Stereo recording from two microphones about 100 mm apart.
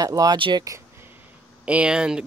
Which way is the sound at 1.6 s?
10° right (ahead or behind).